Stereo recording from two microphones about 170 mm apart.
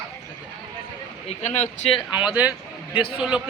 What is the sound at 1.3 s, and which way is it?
Speech, 45° left (ahead or behind).